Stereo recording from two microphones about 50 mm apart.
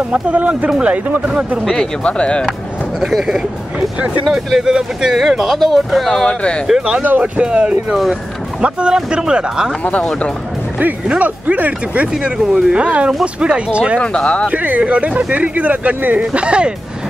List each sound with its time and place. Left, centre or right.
0.1 s speech: right
0.7 s speech: centre
0.9 s speech: right
2.0 s speech: left
3.0 s speech: centre
6.2 s speech: centre
7.0 s speech: right
7.4 s speech: right
10.0 s speech: left
10.8 s speech: right
12.1 s speech: centre
13.9 s speech: centre
14.5 s speech: right
16.3 s speech: right